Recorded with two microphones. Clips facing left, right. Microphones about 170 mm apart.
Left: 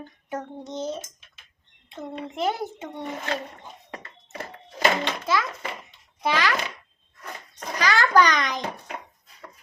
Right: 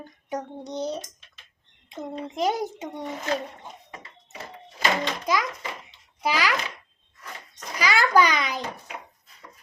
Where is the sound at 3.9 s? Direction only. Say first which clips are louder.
Left 4 dB; 65° left (ahead or behind).